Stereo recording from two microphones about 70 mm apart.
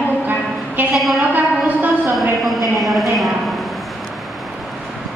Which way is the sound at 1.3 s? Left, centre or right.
Right.